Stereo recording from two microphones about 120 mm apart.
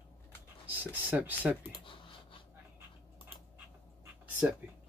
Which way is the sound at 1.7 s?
45° left (ahead or behind).